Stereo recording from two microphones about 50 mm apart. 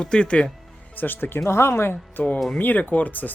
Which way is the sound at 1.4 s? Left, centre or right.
Left.